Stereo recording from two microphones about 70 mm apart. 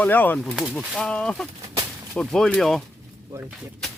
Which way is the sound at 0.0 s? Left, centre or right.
Left.